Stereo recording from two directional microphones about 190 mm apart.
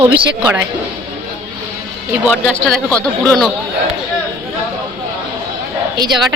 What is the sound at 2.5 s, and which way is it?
A woman's voice, 5° left (ahead or behind).